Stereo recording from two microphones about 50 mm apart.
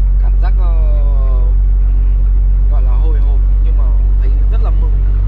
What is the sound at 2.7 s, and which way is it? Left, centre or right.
Vehicle, centre.